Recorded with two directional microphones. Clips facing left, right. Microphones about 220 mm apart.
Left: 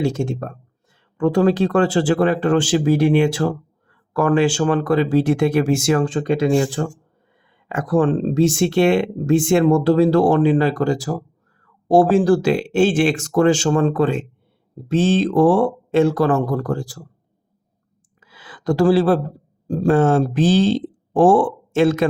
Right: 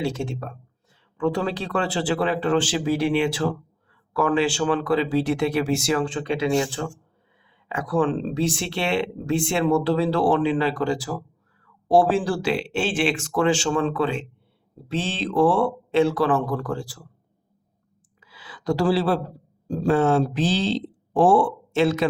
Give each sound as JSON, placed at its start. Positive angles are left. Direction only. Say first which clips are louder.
{"t": 0.0, "sound": "speech", "louder": "left 6 dB", "side_deg": 45}
{"t": 18.2, "sound": "a sound", "louder": "left 2 dB", "side_deg": 50}
{"t": 19.6, "sound": "speech", "louder": "left 4 dB", "side_deg": 50}